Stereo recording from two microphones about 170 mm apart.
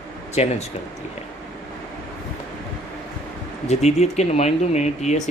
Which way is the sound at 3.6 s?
40° left (ahead or behind).